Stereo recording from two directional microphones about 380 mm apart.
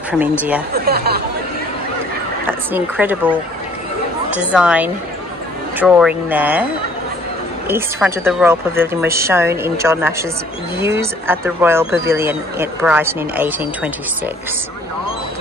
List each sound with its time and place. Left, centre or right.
0.1 s speech: centre
0.7 s speech: right
2.7 s speech: centre
4.5 s speech: centre
7.6 s speech: centre